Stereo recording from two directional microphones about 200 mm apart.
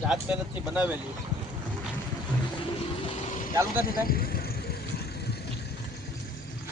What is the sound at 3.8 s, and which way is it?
Vehicle, 45° left (ahead or behind).